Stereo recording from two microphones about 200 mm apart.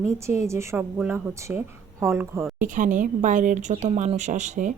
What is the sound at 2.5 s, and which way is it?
A woman's voice, 40° right (ahead or behind).